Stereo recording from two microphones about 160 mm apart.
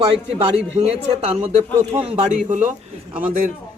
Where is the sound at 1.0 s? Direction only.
40° right (ahead or behind).